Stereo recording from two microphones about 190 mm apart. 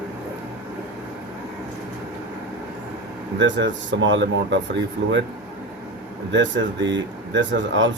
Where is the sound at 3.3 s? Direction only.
70° right (ahead or behind).